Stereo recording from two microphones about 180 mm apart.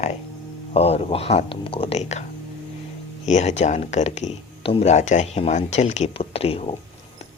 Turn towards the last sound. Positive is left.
turn(degrees=35)  # may be behind; listen again after turning